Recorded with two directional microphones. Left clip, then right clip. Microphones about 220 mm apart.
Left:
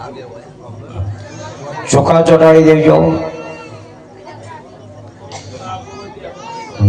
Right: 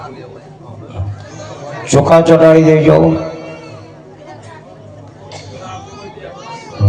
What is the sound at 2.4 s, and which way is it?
Mantra, 20° right (ahead or behind).